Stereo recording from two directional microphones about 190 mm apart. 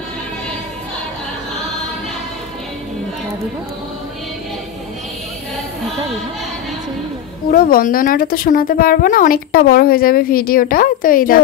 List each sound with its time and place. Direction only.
7.5 s a woman's voice: 50° left (ahead or behind)